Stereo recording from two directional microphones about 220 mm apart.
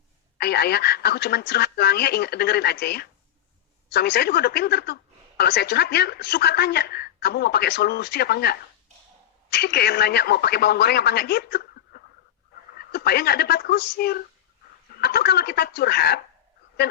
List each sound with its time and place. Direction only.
0.3 s a woman's voice: 45° left (ahead or behind)